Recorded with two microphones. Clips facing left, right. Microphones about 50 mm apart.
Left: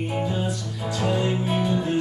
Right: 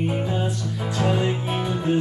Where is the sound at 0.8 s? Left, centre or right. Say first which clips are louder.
Right 1 dB; centre.